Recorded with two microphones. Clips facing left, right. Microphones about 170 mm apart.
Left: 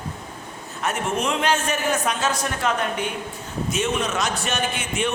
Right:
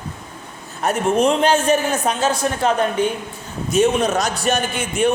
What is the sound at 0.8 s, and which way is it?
A man's voice, 35° right (ahead or behind).